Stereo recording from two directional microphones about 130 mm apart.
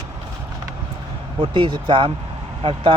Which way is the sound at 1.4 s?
40° right (ahead or behind).